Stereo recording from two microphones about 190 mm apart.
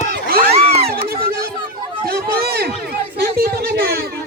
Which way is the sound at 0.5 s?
30° right (ahead or behind).